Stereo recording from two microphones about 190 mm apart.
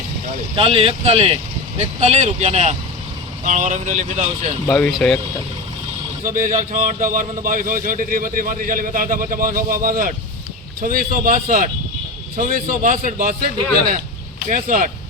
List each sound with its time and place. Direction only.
0.5 s speech: 30° right (ahead or behind)
4.7 s speech: centre (ahead or behind)
6.2 s a man's voice: 45° right (ahead or behind)
14.5 s a man's voice: 45° right (ahead or behind)